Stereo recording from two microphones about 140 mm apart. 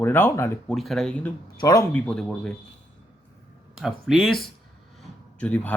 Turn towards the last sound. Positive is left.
turn(degrees=10)  # may be behind; listen again after turning